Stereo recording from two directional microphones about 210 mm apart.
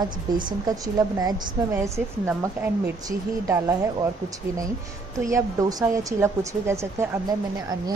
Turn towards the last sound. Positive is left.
turn(degrees=-15)  # may be behind; listen again after turning